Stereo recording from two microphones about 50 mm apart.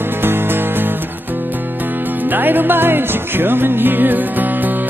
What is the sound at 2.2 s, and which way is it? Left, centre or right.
Music, right.